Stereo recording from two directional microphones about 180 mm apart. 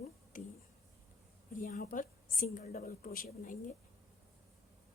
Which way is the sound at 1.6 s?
50° left (ahead or behind).